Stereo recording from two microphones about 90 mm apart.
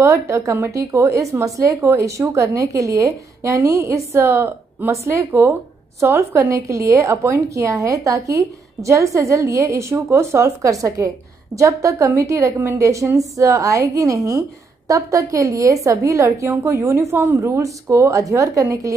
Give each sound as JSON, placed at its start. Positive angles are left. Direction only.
{"t": 0.0, "sound": "a woman's voice", "side_deg": -30}